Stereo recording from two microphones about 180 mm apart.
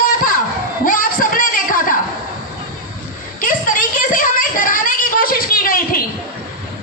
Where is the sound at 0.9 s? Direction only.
50° left (ahead or behind).